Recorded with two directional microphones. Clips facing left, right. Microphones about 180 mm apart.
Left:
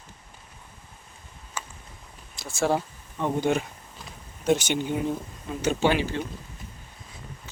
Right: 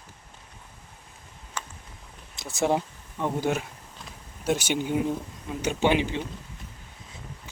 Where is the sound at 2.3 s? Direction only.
20° right (ahead or behind).